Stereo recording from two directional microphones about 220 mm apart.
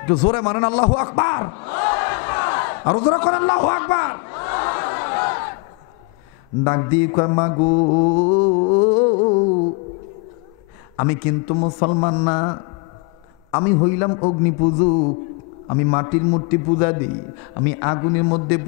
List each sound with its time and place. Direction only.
0.0 s a man's voice: 25° left (ahead or behind)
0.3 s a man's voice: 10° left (ahead or behind)
0.9 s battle cry: 15° left (ahead or behind)
3.2 s crowd: 10° left (ahead or behind)
6.6 s mantra: 25° left (ahead or behind)
11.4 s a man's voice: 30° left (ahead or behind)